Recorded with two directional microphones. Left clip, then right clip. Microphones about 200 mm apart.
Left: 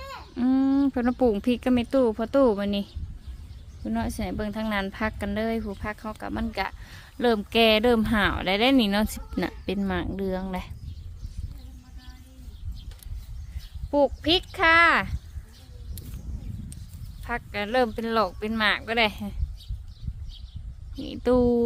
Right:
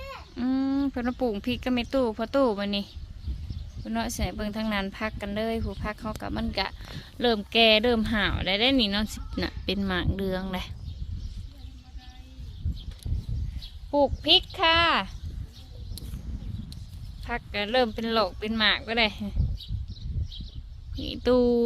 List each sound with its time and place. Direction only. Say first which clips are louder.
0.3 s speech: left 4 dB; 20° left (ahead or behind)
5.6 s speech: left 1 dB; 5° left (ahead or behind)
13.9 s speech: right 1 dB; 20° left (ahead or behind)
17.2 s speech: even; 10° left (ahead or behind)
20.9 s speech: even; 5° left (ahead or behind)